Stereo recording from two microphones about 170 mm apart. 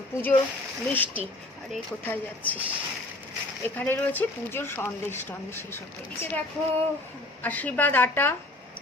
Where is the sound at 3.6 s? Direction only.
10° left (ahead or behind).